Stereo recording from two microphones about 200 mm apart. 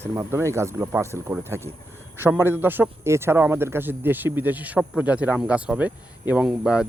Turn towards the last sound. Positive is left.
turn(degrees=-5)  # may be behind; listen again after turning